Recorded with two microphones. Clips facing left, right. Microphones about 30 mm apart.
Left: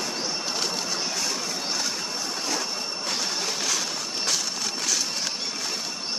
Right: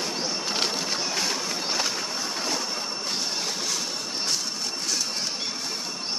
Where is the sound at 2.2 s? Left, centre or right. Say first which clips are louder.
Even; centre.